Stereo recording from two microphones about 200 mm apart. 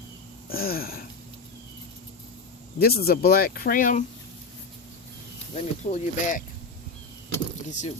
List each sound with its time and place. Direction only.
0.4 s speech: 50° left (ahead or behind)
2.7 s speech: 50° left (ahead or behind)
5.5 s speech: 35° left (ahead or behind)
7.7 s speech: 35° left (ahead or behind)